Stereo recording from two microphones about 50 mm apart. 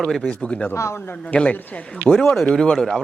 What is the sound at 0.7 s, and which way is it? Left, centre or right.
Speech, left.